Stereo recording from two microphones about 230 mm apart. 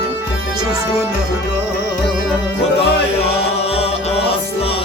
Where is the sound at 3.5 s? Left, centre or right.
Left.